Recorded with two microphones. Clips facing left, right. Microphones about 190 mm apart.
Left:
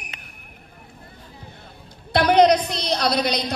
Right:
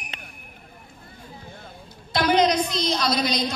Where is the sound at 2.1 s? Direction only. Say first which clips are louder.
Left 5 dB; 65° left (ahead or behind).